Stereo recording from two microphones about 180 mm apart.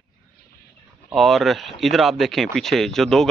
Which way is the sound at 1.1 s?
Centre (ahead or behind).